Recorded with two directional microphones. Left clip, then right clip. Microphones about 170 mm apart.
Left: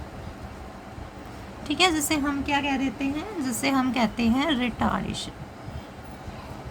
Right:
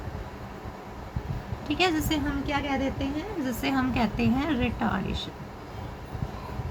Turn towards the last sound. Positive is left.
turn(degrees=30)  # may be behind; listen again after turning